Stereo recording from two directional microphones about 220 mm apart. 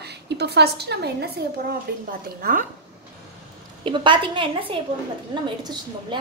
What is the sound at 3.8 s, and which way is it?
A woman's voice, 20° right (ahead or behind).